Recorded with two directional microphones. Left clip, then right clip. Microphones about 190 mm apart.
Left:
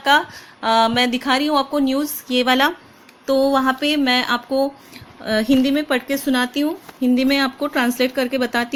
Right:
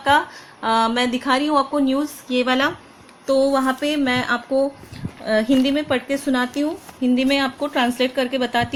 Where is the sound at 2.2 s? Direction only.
45° left (ahead or behind).